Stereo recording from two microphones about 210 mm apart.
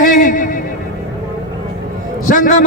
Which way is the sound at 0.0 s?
40° left (ahead or behind).